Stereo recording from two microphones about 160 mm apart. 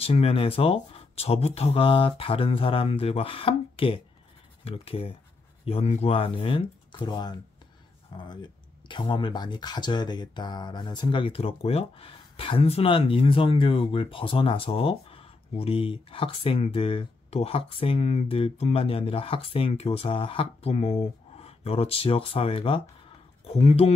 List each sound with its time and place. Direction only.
0.0 s speech: 40° left (ahead or behind)